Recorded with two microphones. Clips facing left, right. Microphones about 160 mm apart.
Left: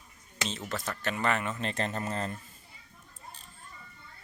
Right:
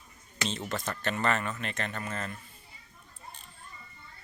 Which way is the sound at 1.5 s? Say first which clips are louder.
Left 3 dB; 30° left (ahead or behind).